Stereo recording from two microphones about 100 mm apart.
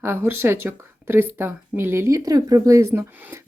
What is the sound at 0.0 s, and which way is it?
Speech, 25° right (ahead or behind).